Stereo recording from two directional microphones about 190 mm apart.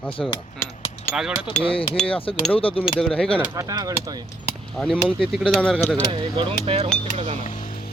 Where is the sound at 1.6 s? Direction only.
30° left (ahead or behind).